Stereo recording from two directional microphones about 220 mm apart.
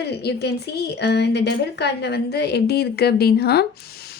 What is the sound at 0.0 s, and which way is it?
A woman's voice, 50° left (ahead or behind).